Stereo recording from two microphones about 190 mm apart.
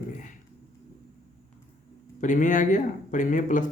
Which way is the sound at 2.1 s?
40° left (ahead or behind).